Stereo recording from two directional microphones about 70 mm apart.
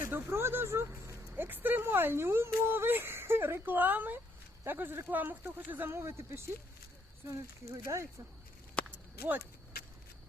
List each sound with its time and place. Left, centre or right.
0.0 s speech: right
1.3 s speech: right
7.3 s speech: right
8.8 s a sound: centre